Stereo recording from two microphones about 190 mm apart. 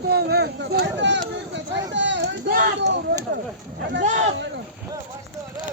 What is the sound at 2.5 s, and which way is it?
Speech, 55° right (ahead or behind).